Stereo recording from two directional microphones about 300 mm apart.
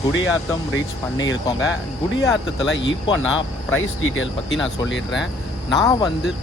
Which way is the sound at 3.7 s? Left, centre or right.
Left.